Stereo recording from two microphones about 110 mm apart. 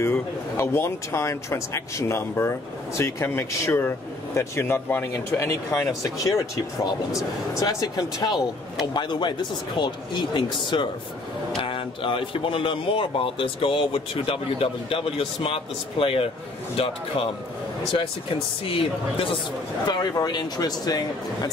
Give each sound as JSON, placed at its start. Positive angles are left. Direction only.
{"t": 0.0, "sound": "a man's voice", "side_deg": 20}
{"t": 18.7, "sound": "speech", "side_deg": 55}
{"t": 19.9, "sound": "speech", "side_deg": 40}